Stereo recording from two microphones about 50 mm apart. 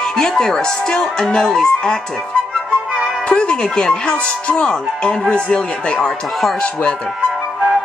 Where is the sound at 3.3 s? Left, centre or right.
Centre.